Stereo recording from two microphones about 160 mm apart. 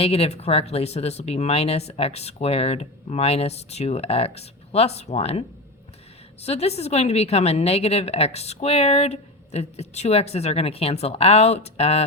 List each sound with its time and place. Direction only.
0.0 s a woman's voice: 40° left (ahead or behind)
6.4 s a woman's voice: 40° left (ahead or behind)